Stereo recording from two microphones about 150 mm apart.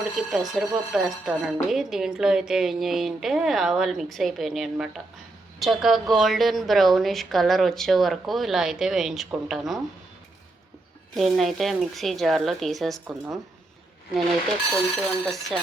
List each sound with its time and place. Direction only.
0.2 s speech: centre (ahead or behind)
11.1 s speech: centre (ahead or behind)
14.7 s speech: centre (ahead or behind)